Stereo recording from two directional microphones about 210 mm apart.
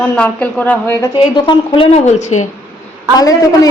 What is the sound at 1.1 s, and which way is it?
A woman's voice, 25° left (ahead or behind).